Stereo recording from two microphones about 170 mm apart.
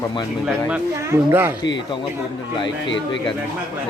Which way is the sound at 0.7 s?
10° right (ahead or behind).